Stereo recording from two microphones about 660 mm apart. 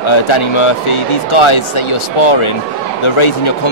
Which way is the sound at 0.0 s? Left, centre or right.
Left.